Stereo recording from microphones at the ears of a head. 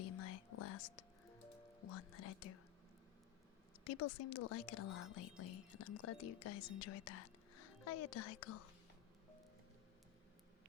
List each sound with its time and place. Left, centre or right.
0.0 s whispering: left
1.8 s speech: left
3.8 s speech: left